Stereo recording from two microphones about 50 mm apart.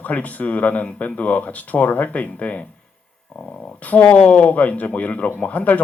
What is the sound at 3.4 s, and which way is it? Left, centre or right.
Speech, centre.